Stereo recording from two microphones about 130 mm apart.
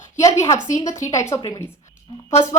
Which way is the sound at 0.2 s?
25° left (ahead or behind).